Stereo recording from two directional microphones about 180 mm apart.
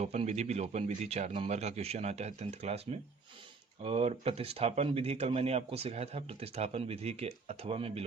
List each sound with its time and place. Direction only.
0.0 s speech: 35° right (ahead or behind)
3.8 s speech: 35° right (ahead or behind)